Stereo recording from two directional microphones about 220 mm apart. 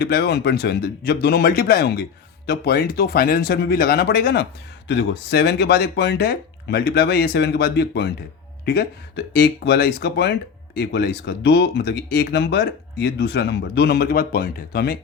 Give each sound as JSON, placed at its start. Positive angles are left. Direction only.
{"t": 0.0, "sound": "speech", "side_deg": 45}